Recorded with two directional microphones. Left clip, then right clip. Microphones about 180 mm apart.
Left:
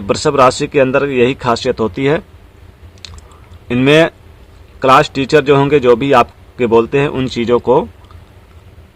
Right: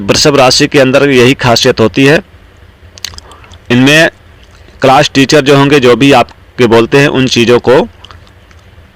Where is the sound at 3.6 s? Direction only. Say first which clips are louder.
Right 4 dB; 25° right (ahead or behind).